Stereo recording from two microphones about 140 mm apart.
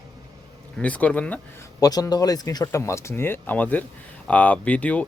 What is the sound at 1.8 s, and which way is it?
Speech, 25° left (ahead or behind).